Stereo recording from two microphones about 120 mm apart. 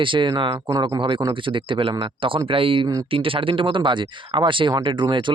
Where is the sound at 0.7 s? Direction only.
30° right (ahead or behind).